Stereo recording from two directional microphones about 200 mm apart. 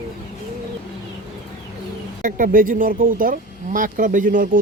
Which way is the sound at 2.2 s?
45° right (ahead or behind).